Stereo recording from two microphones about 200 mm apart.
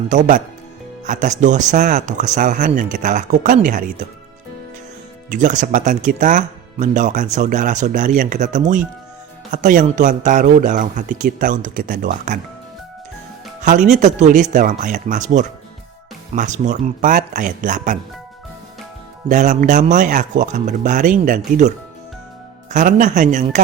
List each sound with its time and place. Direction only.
0.1 s speech: 40° right (ahead or behind)
5.3 s speech: 40° right (ahead or behind)
13.6 s speech: 40° right (ahead or behind)
19.3 s speech: 40° right (ahead or behind)
22.7 s speech: 40° right (ahead or behind)